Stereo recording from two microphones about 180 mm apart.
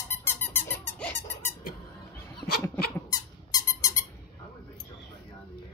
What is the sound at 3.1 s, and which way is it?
Squeak, 20° left (ahead or behind).